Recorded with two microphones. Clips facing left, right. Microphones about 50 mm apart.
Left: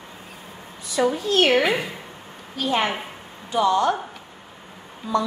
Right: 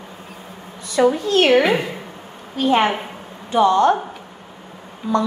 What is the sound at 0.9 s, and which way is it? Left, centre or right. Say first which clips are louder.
Speech: right 5 dB; right.